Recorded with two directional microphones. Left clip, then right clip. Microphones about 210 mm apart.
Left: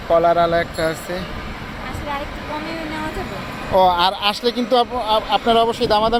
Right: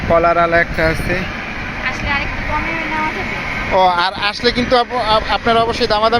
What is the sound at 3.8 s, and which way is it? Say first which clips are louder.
Speech: right 1 dB; 5° left (ahead or behind).